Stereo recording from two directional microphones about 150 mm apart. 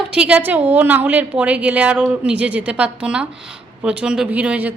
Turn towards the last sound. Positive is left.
turn(degrees=-10)  # may be behind; listen again after turning